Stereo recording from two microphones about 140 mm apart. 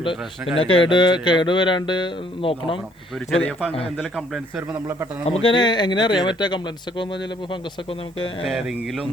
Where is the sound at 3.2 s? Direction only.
5° left (ahead or behind).